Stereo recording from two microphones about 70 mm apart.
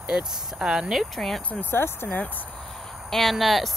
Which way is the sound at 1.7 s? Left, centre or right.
Left.